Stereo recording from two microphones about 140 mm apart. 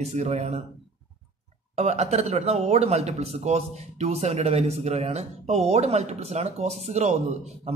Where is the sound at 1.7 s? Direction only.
50° right (ahead or behind).